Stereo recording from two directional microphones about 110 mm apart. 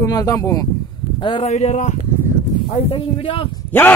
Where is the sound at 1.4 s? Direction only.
85° left.